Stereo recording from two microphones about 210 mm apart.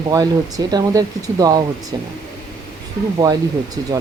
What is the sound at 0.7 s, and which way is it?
Speech, 20° right (ahead or behind).